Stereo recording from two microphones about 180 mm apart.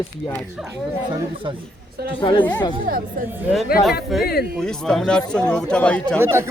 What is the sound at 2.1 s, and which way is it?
Speech, 25° left (ahead or behind).